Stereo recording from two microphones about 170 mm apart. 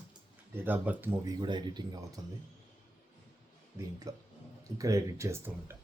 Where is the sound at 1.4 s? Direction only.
25° right (ahead or behind).